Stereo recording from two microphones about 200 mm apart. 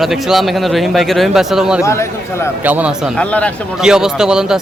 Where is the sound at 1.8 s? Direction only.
15° left (ahead or behind).